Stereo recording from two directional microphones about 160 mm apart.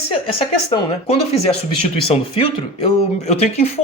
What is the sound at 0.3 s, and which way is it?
Speech, 35° left (ahead or behind).